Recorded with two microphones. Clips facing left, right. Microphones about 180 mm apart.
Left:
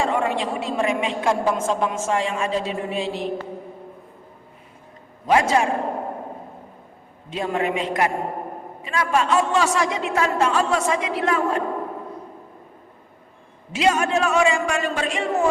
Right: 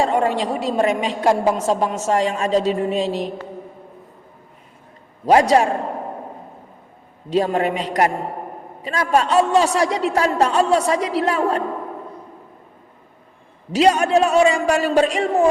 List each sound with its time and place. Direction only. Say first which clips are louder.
0.0 s a woman's voice: right 4 dB; 35° right (ahead or behind)
5.2 s a woman's voice: right 5 dB; 35° right (ahead or behind)
7.3 s a woman's voice: right 5 dB; 35° right (ahead or behind)
13.7 s a woman's voice: right 5 dB; 35° right (ahead or behind)